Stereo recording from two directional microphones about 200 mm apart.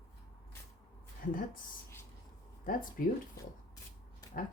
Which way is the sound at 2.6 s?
45° left (ahead or behind).